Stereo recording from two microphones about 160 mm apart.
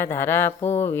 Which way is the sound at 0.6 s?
40° left (ahead or behind).